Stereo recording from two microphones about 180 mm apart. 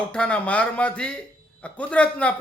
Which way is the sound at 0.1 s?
5° left (ahead or behind).